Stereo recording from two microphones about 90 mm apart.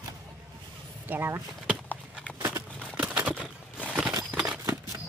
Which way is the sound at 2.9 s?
15° right (ahead or behind).